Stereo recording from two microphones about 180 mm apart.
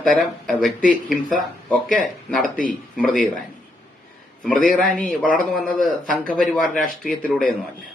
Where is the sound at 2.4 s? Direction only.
50° left (ahead or behind).